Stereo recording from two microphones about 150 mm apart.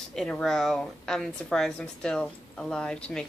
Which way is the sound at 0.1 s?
5° left (ahead or behind).